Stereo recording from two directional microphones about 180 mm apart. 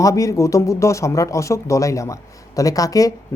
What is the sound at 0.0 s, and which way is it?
Speech, 20° left (ahead or behind).